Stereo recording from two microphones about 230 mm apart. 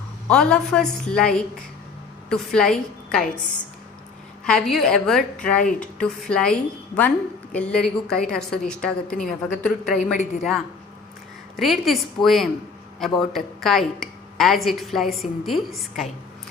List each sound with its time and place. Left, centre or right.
0.3 s a woman's voice: centre
4.4 s a woman's voice: centre
11.5 s a woman's voice: centre